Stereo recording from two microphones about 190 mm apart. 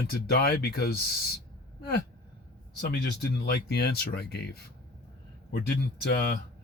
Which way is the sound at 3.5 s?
60° left (ahead or behind).